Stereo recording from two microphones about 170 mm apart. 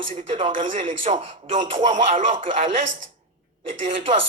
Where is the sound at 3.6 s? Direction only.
35° right (ahead or behind).